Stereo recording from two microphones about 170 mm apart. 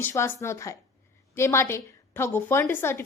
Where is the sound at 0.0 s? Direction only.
15° left (ahead or behind).